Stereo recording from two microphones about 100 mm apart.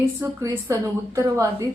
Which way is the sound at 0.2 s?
25° right (ahead or behind).